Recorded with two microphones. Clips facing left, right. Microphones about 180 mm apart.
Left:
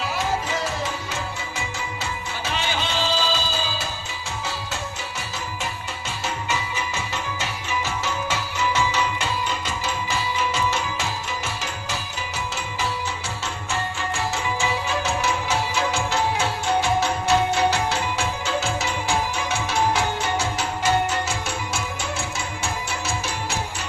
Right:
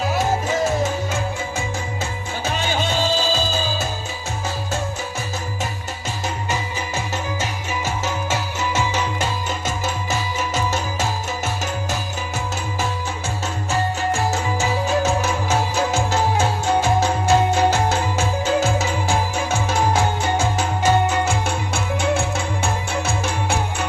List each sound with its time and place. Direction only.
0.0 s music: 45° right (ahead or behind)
6.2 s music: 40° right (ahead or behind)
13.7 s music: 40° right (ahead or behind); by 23.6 s 55° right (ahead or behind)